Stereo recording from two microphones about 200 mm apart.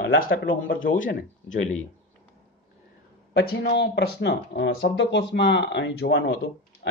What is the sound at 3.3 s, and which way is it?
Speech, 55° left (ahead or behind).